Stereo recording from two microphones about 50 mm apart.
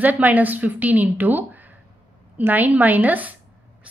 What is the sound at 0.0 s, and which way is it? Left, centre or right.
A woman's voice, right.